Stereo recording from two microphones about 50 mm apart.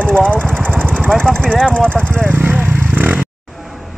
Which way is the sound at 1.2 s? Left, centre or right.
Centre.